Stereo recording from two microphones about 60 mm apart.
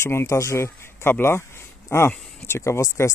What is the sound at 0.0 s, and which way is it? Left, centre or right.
Speech, left.